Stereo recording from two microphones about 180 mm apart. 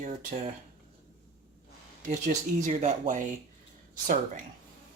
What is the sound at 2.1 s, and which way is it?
Speech, 40° right (ahead or behind).